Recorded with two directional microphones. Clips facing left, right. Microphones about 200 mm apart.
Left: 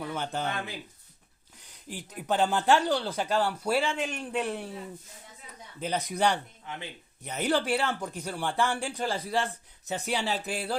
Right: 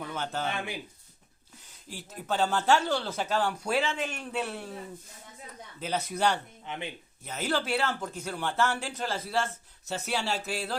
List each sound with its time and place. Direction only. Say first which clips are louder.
0.0 s speech: left 1 dB; 10° left (ahead or behind)
0.5 s speech: right 1 dB; 15° right (ahead or behind)
2.0 s speech: left 2 dB; 15° left (ahead or behind)
5.8 s speech: left 1 dB; 15° left (ahead or behind)
6.7 s speech: right 3 dB; 20° right (ahead or behind)
7.3 s speech: left 3 dB; 15° left (ahead or behind)